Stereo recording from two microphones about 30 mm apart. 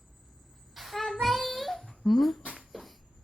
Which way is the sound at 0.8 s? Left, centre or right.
Centre.